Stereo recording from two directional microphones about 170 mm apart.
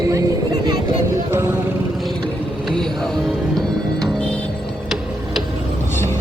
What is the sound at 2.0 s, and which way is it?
Vehicle, centre (ahead or behind).